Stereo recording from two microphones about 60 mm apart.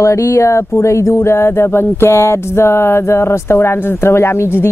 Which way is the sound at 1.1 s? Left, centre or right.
Left.